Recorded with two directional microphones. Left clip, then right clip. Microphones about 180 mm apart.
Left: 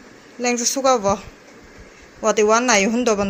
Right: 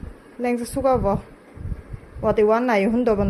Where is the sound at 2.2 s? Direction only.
15° right (ahead or behind).